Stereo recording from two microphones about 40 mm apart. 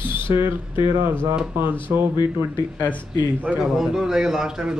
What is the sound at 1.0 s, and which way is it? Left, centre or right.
Speech, right.